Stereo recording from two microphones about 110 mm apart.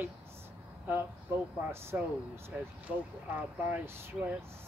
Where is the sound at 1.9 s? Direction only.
20° right (ahead or behind).